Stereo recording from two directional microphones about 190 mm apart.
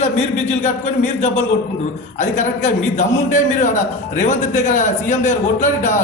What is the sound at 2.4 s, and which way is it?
A man's voice, 40° left (ahead or behind).